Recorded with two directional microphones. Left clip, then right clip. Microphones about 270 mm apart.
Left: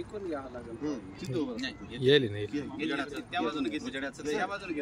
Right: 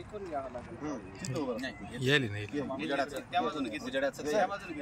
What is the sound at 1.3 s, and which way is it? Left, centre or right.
Speech, centre.